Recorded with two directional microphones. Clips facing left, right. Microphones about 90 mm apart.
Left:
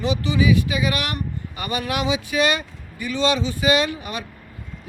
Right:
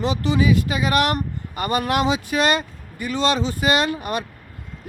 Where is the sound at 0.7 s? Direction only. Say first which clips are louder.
Right 4 dB; 45° right (ahead or behind).